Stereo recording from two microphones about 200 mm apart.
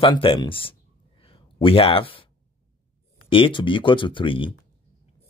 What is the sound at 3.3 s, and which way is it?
Speech, 25° left (ahead or behind).